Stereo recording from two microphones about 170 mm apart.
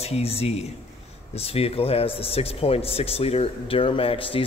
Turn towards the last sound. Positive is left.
turn(degrees=30)  # may be behind; listen again after turning